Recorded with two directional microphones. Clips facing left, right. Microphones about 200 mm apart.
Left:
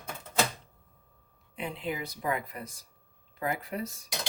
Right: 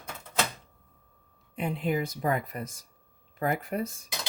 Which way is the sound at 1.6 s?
50° right (ahead or behind).